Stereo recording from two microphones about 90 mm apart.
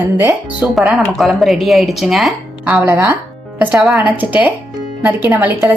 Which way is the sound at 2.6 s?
15° right (ahead or behind).